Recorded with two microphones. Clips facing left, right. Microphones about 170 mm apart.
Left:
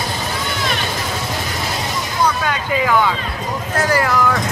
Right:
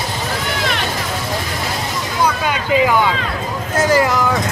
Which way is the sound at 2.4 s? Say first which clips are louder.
Right 3 dB; 15° right (ahead or behind).